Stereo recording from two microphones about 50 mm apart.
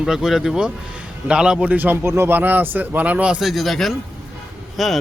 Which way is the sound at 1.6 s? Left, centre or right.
Right.